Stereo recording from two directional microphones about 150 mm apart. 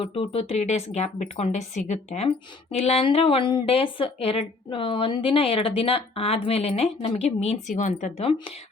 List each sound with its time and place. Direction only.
0.0 s speech: 40° left (ahead or behind); by 8.1 s 55° left (ahead or behind)
8.2 s speech: 35° left (ahead or behind)